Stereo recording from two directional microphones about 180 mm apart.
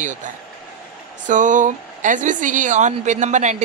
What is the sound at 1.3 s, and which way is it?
Speech, 45° right (ahead or behind).